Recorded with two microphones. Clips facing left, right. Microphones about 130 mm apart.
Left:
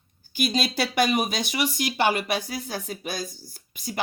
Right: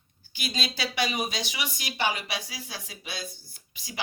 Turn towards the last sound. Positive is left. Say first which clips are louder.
# left 9 dB
turn(degrees=55)  # may be behind; listen again after turning